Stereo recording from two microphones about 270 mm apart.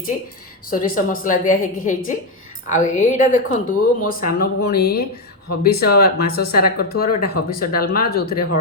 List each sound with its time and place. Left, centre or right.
0.7 s speech: left